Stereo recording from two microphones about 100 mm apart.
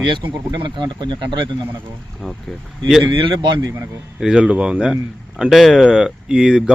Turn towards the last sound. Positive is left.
turn(degrees=-10)  # may be behind; listen again after turning